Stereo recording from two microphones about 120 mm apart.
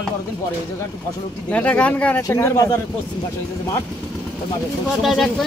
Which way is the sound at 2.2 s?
25° left (ahead or behind).